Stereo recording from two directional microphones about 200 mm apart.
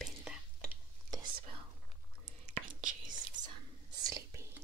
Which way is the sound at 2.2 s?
35° right (ahead or behind).